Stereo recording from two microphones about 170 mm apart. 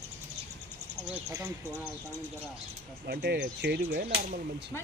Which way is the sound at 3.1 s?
70° right (ahead or behind).